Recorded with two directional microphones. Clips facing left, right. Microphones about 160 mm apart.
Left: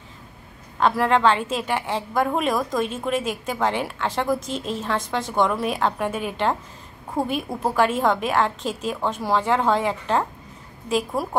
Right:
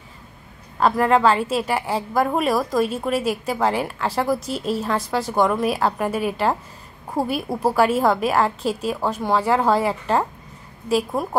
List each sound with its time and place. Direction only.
0.7 s a woman's voice: 5° right (ahead or behind)